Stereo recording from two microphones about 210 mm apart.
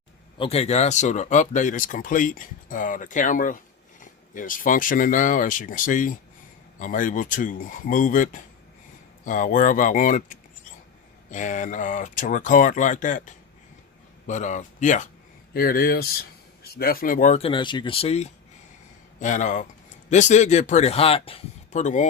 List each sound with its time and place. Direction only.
0.3 s speech: 30° left (ahead or behind)